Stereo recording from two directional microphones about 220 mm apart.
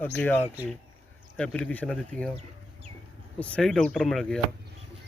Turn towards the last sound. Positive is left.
turn(degrees=0)  # may be behind; listen again after turning